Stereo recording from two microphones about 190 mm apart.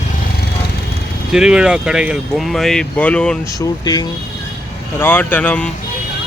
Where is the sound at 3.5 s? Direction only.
20° left (ahead or behind).